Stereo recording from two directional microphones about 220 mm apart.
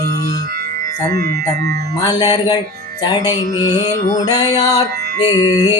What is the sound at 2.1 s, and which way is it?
Speech, 20° left (ahead or behind).